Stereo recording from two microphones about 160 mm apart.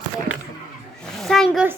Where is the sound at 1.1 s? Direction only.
Centre (ahead or behind).